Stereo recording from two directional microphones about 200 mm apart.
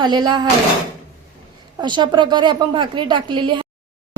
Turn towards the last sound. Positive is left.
turn(degrees=-25)  # may be behind; listen again after turning